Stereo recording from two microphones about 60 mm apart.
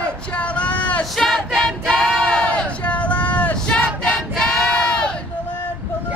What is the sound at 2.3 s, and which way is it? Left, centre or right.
Crowd, centre.